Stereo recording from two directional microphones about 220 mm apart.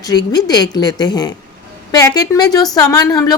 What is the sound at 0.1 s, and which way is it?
A woman's voice, 20° left (ahead or behind).